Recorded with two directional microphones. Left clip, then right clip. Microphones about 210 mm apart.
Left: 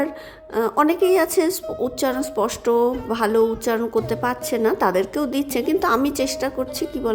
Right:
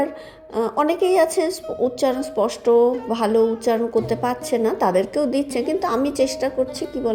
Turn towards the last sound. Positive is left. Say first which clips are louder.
# right 2 dB
turn(degrees=15)  # may be behind; listen again after turning